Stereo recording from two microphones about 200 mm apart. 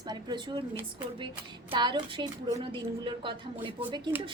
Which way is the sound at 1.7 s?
25° right (ahead or behind).